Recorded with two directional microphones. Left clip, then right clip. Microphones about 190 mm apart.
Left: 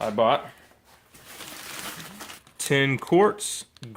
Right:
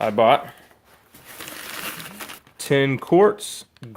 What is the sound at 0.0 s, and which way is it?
Speech, 20° right (ahead or behind).